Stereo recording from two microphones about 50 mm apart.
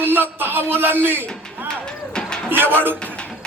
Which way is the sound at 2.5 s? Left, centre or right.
Right.